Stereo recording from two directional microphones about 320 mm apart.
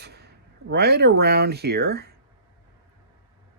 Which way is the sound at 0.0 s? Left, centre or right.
Right.